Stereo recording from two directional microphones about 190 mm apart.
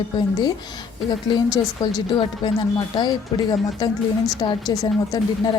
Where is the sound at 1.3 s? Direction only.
20° left (ahead or behind).